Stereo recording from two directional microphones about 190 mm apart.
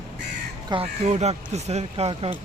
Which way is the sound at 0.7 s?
35° right (ahead or behind).